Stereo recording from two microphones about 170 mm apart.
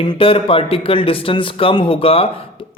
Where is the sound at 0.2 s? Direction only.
35° left (ahead or behind).